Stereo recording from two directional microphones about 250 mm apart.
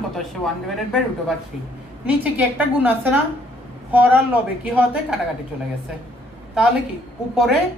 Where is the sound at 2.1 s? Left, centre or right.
Centre.